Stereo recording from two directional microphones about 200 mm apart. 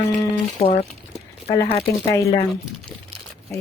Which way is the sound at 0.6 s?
30° left (ahead or behind).